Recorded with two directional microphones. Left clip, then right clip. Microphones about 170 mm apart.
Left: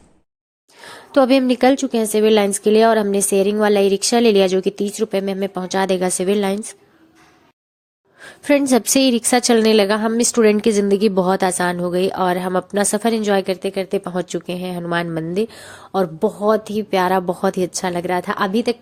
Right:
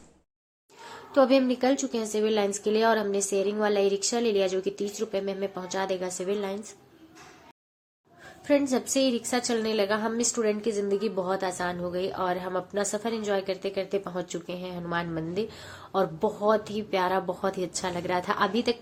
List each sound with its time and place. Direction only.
1.1 s a woman's voice: 60° left (ahead or behind)
8.2 s a woman's voice: 65° left (ahead or behind); by 18.8 s 40° left (ahead or behind)